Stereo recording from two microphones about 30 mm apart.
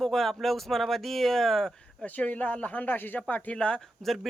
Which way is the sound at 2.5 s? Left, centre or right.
Left.